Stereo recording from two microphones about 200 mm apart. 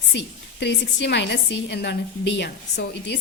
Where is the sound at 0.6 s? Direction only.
60° left (ahead or behind).